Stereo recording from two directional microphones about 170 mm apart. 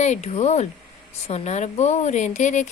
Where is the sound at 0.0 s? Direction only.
40° left (ahead or behind).